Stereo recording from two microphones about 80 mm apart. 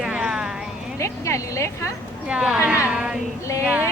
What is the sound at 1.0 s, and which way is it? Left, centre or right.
Speech, left.